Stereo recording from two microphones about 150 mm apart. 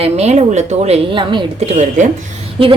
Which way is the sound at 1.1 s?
30° right (ahead or behind).